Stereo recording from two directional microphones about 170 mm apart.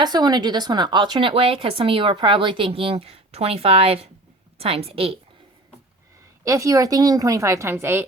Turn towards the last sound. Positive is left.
turn(degrees=-15)  # may be behind; listen again after turning